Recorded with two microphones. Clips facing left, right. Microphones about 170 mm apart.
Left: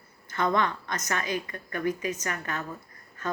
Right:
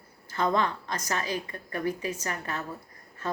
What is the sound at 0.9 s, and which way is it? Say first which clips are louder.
A woman's voice: left 1 dB; 30° right (ahead or behind).